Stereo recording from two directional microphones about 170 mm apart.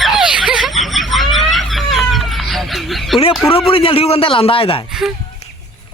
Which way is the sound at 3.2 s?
35° left (ahead or behind).